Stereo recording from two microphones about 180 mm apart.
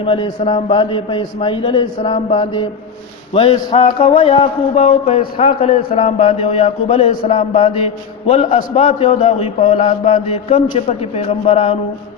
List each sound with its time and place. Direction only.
0.0 s a man's voice: 30° left (ahead or behind)